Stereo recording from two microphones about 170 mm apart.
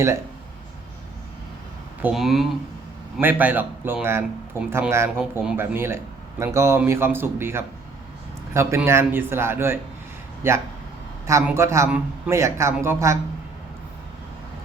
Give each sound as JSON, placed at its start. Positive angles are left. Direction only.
{"t": 2.0, "sound": "a man's voice", "side_deg": -5}